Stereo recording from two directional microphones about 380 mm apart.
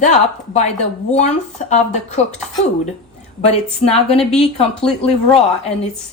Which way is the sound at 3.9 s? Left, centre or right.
Centre.